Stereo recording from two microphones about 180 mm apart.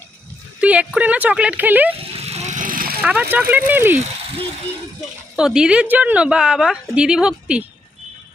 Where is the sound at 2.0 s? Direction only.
35° right (ahead or behind); by 3.0 s 55° right (ahead or behind).